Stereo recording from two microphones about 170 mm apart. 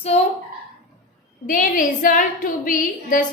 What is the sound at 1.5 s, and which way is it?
A woman's voice, 50° left (ahead or behind).